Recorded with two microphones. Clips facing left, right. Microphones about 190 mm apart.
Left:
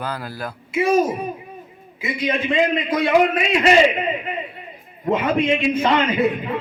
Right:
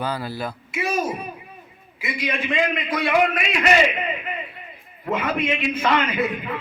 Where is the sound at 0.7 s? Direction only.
30° left (ahead or behind).